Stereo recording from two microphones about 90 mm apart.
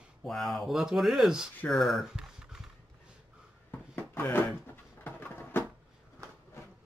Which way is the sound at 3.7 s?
20° left (ahead or behind).